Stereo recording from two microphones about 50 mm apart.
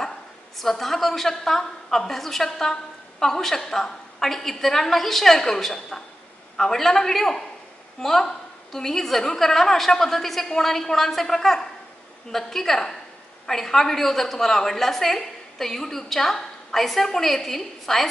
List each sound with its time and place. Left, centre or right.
0.6 s a woman's voice: centre